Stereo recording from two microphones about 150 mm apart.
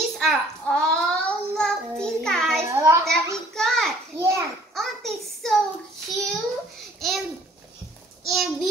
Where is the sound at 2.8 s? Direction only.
20° right (ahead or behind).